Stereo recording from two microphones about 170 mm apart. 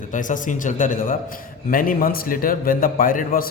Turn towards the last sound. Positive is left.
turn(degrees=55)  # may be behind; listen again after turning